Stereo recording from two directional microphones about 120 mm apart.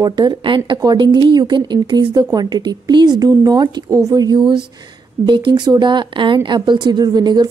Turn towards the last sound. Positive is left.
turn(degrees=-35)  # may be behind; listen again after turning